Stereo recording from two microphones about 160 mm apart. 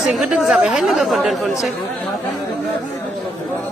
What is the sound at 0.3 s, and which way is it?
Speech, 5° right (ahead or behind).